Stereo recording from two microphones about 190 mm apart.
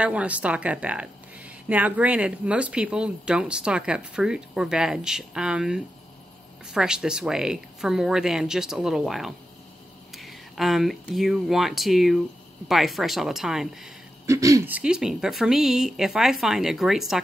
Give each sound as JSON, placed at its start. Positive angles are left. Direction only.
{"t": 0.0, "sound": "a woman's voice", "side_deg": -5}
{"t": 14.2, "sound": "speech", "side_deg": -15}
{"t": 14.8, "sound": "a woman's voice", "side_deg": -5}